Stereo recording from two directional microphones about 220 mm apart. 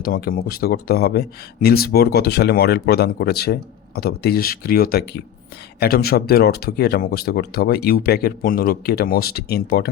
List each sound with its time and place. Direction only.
0.0 s speech: 40° left (ahead or behind)